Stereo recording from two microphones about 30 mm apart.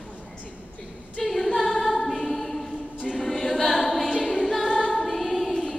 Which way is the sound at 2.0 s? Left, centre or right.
Centre.